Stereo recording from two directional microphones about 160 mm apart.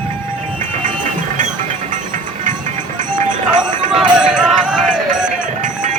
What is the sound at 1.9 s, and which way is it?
Music, 55° right (ahead or behind).